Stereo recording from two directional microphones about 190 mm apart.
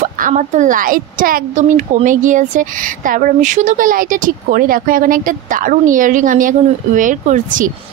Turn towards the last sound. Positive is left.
turn(degrees=-45)  # may be behind; listen again after turning